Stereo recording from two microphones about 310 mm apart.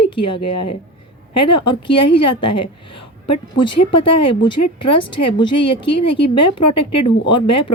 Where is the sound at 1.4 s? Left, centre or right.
Centre.